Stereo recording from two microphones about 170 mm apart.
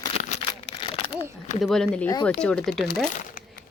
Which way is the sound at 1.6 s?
Centre (ahead or behind).